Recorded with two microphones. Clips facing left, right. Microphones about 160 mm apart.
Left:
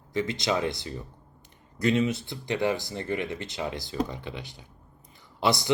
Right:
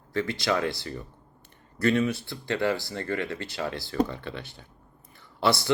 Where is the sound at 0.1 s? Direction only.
20° left (ahead or behind).